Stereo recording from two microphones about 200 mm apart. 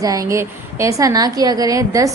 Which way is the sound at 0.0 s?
15° right (ahead or behind).